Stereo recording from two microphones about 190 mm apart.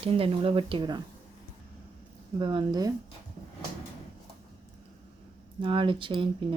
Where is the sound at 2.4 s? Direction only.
25° right (ahead or behind).